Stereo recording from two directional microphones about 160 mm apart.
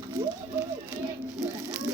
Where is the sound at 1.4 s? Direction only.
20° right (ahead or behind).